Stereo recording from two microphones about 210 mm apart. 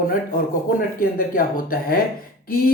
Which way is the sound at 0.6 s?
40° left (ahead or behind).